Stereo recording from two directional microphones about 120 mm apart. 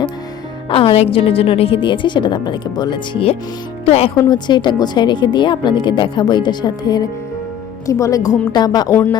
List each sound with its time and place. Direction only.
0.7 s a woman's voice: 50° left (ahead or behind)
3.8 s speech: 55° left (ahead or behind)
4.3 s speech: 40° left (ahead or behind)